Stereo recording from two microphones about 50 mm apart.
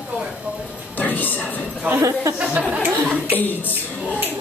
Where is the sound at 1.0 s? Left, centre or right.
Left.